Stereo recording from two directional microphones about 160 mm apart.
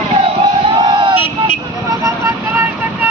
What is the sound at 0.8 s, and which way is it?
Vehicle, 30° right (ahead or behind).